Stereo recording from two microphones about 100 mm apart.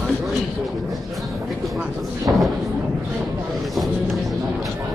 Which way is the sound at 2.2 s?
Centre (ahead or behind).